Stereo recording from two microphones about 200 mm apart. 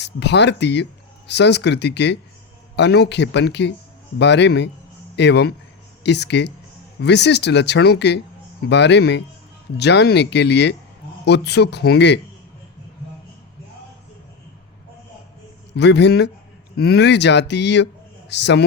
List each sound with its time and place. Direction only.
0.0 s speech: 60° left (ahead or behind)
15.7 s speech: 60° left (ahead or behind)